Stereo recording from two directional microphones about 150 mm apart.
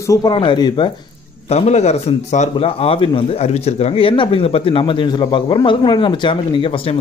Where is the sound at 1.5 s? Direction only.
45° left (ahead or behind).